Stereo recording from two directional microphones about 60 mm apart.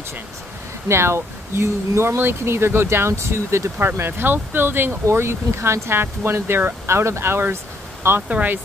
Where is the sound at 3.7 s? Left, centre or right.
Right.